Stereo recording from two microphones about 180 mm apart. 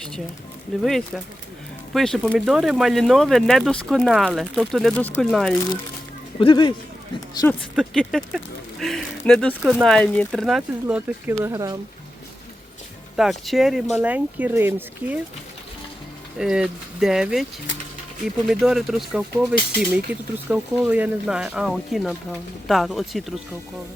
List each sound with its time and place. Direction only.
0.8 s speech: centre (ahead or behind)
6.4 s speech: 25° left (ahead or behind)
7.8 s speech: centre (ahead or behind); by 11.8 s 20° right (ahead or behind)
13.1 s speech: centre (ahead or behind)
16.4 s speech: 5° right (ahead or behind)
18.4 s speech: centre (ahead or behind)